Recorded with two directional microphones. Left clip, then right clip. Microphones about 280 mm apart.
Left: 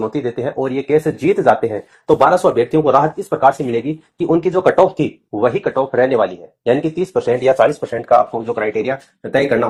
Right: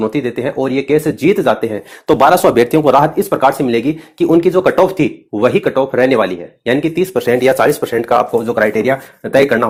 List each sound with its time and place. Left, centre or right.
0.0 s speech: right